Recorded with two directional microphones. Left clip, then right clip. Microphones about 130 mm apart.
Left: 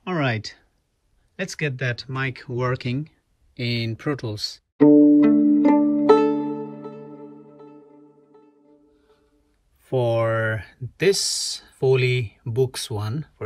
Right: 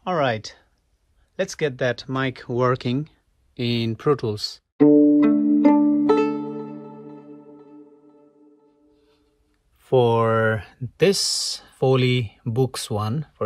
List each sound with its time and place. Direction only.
0.0 s a sound: 15° right (ahead or behind)
1.3 s speech: 15° right (ahead or behind)
4.7 s music: centre (ahead or behind)
9.8 s speech: 25° right (ahead or behind)